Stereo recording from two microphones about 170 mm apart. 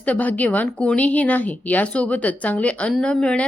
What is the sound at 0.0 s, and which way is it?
A woman's voice, 10° left (ahead or behind).